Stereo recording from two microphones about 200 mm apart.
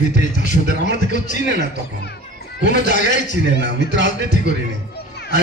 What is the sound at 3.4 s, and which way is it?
A man's voice, 60° right (ahead or behind).